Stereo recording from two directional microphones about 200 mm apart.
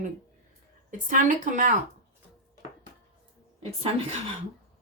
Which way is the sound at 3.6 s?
30° right (ahead or behind).